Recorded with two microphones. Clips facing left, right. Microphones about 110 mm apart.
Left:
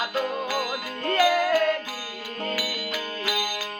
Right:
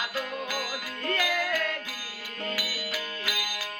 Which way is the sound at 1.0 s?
40° left (ahead or behind).